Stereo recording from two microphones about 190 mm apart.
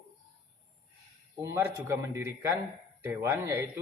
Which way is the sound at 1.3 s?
15° right (ahead or behind).